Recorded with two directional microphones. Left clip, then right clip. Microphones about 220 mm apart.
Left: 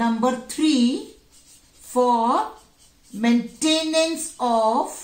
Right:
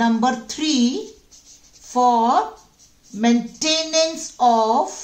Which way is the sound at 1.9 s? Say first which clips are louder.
Right 3 dB; 45° right (ahead or behind).